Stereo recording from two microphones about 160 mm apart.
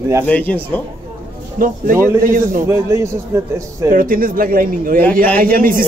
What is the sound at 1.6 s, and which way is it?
Speech, 60° right (ahead or behind).